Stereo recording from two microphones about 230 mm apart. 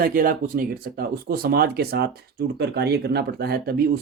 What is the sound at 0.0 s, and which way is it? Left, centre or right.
Speech, right.